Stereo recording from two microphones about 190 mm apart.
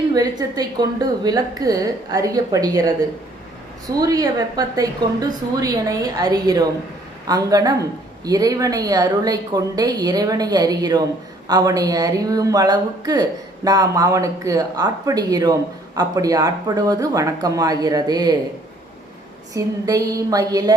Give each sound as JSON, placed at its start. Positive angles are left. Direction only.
{"t": 0.1, "sound": "speech", "side_deg": -20}
{"t": 19.5, "sound": "speech", "side_deg": -20}